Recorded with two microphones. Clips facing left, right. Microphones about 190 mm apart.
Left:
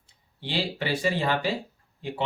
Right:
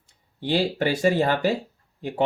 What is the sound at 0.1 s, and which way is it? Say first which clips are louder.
Speech: right 8 dB; 45° right (ahead or behind).